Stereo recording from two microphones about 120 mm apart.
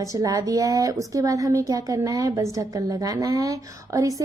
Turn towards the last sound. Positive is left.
turn(degrees=-30)  # may be behind; listen again after turning